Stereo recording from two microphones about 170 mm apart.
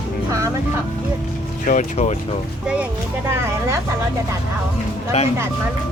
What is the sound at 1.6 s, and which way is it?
Speech, 45° left (ahead or behind).